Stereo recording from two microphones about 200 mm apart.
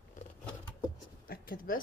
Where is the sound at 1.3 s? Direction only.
50° left (ahead or behind).